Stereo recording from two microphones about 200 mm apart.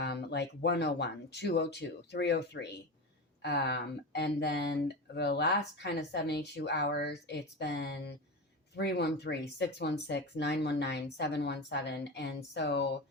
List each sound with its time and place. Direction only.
0.0 s speech: 55° left (ahead or behind)